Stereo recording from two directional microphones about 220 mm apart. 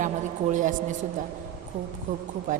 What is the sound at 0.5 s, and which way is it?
Speech, 35° right (ahead or behind).